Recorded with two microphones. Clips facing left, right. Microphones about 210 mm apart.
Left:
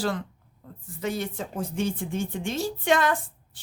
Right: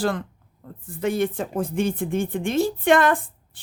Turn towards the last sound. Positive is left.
turn(degrees=-55)  # may be behind; listen again after turning